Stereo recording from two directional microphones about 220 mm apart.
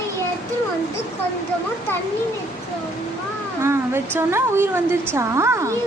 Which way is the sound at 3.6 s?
10° right (ahead or behind).